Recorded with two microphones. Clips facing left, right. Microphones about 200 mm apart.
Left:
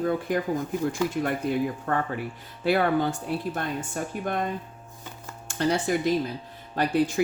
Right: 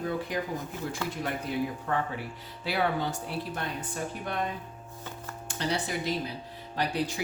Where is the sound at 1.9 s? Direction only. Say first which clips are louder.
Left 3 dB; 55° left (ahead or behind).